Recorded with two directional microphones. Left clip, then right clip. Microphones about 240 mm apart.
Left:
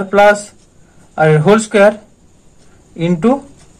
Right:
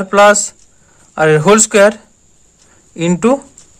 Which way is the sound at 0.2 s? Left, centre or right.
Right.